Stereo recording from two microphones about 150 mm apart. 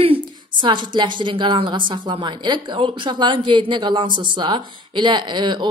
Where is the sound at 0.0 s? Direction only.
35° right (ahead or behind).